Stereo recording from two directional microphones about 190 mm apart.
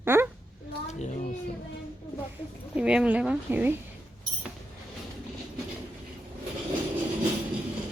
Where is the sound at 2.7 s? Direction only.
5° right (ahead or behind).